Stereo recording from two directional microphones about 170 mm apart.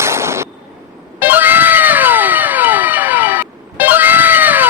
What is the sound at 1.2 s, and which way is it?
Cat, 10° right (ahead or behind).